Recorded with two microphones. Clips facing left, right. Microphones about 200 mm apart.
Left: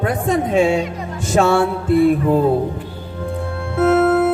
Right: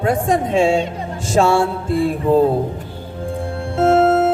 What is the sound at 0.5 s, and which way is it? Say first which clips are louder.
Mantra: even; 30° right (ahead or behind).